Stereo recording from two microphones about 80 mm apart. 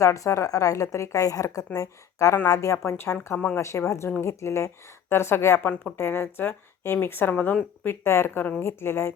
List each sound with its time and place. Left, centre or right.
0.0 s a woman's voice: left
7.9 s a woman's voice: left